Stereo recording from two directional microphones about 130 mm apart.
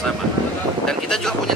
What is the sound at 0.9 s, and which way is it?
Speech, 5° left (ahead or behind).